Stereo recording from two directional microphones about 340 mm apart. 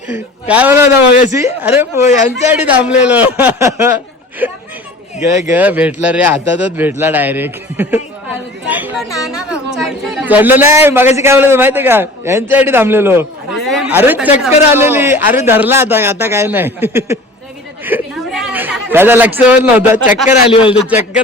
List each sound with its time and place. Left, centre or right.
0.1 s a man's voice: centre
8.6 s a sound: centre
9.0 s a man's voice: centre
20.2 s a man's voice: centre
20.7 s speech: centre